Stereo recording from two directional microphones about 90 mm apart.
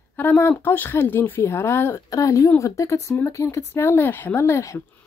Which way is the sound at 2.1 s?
40° left (ahead or behind).